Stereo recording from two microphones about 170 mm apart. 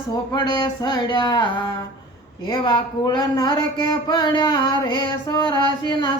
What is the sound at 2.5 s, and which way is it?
Speech, 25° left (ahead or behind).